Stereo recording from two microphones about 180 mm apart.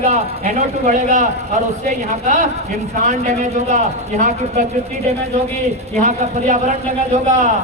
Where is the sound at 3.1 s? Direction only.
40° right (ahead or behind).